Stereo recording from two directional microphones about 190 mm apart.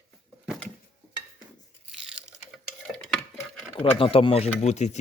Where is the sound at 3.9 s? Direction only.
30° left (ahead or behind).